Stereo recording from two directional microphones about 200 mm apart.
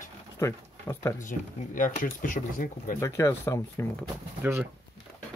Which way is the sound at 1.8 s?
40° left (ahead or behind).